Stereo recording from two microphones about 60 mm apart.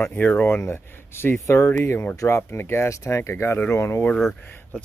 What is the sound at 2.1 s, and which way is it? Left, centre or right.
Speech, left.